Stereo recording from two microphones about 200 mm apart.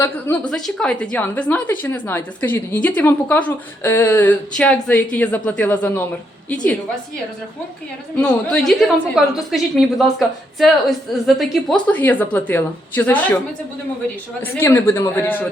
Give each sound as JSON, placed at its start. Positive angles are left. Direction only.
{"t": 0.0, "sound": "a woman's voice", "side_deg": 15}
{"t": 0.5, "sound": "a woman's voice", "side_deg": 5}
{"t": 8.2, "sound": "a woman's voice", "side_deg": 5}
{"t": 14.4, "sound": "a woman's voice", "side_deg": 10}